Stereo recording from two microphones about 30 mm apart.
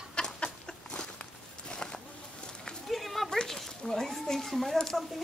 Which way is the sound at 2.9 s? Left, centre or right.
Centre.